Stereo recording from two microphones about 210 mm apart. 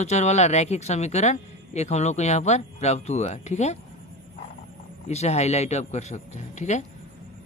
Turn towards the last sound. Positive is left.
turn(degrees=35)  # may be behind; listen again after turning